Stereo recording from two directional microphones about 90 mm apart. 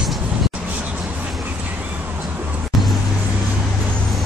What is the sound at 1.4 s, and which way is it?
Vehicle, 20° right (ahead or behind).